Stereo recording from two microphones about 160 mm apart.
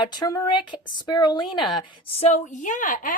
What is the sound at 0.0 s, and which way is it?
A woman's voice, 25° left (ahead or behind).